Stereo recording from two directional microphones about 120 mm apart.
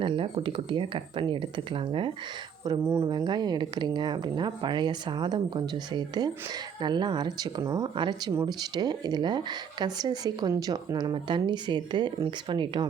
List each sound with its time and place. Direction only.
0.0 s speech: 45° right (ahead or behind)
2.8 s speech: 20° right (ahead or behind)
3.1 s speech: 35° right (ahead or behind)